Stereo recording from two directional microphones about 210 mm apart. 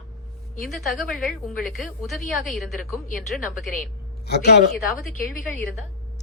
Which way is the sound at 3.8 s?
50° left (ahead or behind).